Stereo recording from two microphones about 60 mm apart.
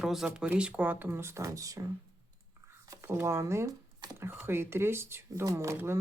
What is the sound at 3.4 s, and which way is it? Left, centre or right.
Speech, right.